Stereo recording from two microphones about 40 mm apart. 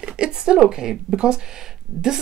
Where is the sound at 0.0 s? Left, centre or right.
Right.